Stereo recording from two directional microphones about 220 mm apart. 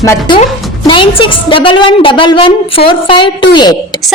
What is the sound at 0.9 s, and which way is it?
A woman's voice, 20° left (ahead or behind).